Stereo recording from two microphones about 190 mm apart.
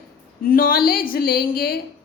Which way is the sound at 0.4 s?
50° left (ahead or behind).